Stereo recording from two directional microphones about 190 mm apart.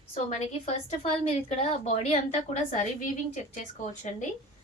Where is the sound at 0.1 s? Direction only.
35° left (ahead or behind).